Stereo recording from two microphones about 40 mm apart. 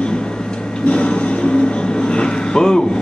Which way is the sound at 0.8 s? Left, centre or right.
Left.